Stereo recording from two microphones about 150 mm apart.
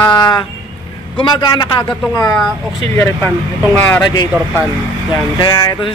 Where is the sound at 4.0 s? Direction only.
30° left (ahead or behind).